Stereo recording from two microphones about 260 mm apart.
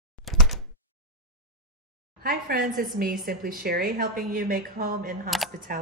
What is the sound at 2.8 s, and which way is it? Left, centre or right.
A woman's voice, right.